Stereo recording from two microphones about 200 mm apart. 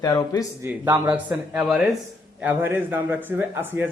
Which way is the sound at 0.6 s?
15° right (ahead or behind).